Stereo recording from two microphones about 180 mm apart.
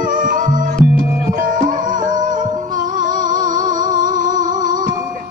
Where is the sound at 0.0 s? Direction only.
50° right (ahead or behind).